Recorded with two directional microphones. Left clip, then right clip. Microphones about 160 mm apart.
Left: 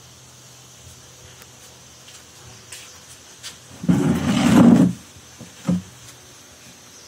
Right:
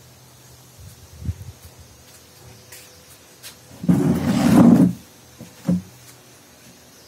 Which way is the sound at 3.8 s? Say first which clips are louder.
Even; 20° right (ahead or behind).